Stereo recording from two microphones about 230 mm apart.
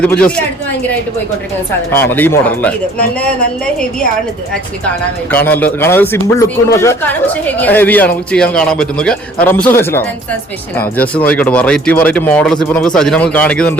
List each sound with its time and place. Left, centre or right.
0.0 s speech: centre
1.9 s speech: centre
5.3 s speech: centre